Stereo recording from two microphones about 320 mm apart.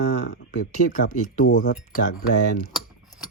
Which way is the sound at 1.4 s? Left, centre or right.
Left.